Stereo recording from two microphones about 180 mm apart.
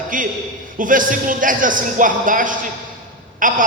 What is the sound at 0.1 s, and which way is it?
A man's voice, 50° right (ahead or behind).